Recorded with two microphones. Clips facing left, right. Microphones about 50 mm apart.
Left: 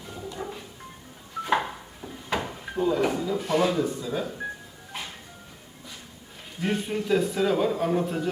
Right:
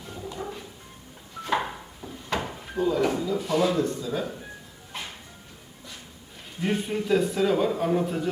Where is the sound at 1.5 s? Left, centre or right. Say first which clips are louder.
Even; centre.